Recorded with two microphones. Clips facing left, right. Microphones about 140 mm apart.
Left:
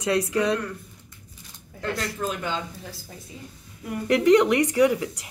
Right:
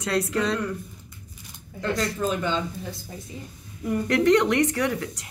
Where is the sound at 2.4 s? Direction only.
5° left (ahead or behind).